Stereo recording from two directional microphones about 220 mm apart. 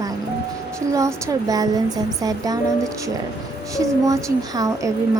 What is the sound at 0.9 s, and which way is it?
Speech, 15° right (ahead or behind).